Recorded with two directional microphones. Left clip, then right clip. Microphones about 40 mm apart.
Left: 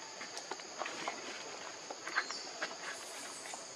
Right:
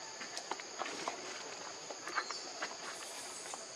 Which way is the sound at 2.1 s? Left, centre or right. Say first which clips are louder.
Left 2 dB; left.